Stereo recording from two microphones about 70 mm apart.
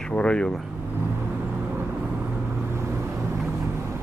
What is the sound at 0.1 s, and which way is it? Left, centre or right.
Speech, centre.